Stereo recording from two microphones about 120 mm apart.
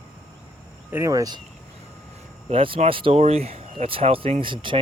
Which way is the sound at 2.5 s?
45° right (ahead or behind).